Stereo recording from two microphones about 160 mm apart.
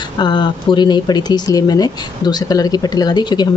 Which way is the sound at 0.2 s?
30° left (ahead or behind).